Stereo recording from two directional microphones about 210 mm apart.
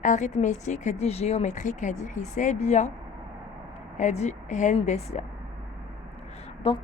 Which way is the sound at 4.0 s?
35° left (ahead or behind).